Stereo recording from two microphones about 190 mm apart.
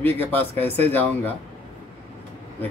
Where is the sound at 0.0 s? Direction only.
10° left (ahead or behind).